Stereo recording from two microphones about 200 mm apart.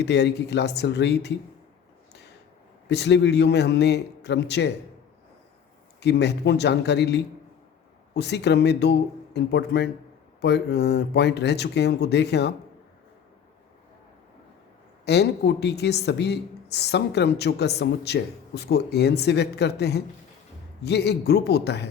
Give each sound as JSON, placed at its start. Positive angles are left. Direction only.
{"t": 0.0, "sound": "speech", "side_deg": 55}
{"t": 2.9, "sound": "speech", "side_deg": 60}
{"t": 6.0, "sound": "speech", "side_deg": 55}
{"t": 15.0, "sound": "speech", "side_deg": 55}